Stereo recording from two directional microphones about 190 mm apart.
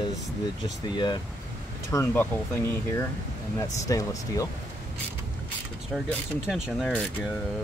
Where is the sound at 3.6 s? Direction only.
15° left (ahead or behind).